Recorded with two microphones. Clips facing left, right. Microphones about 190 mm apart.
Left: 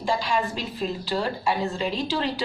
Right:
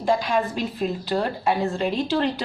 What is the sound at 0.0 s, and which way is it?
A woman's voice, 55° right (ahead or behind).